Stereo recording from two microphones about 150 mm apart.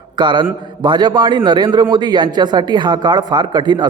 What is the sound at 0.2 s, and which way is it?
A man's voice, 30° right (ahead or behind).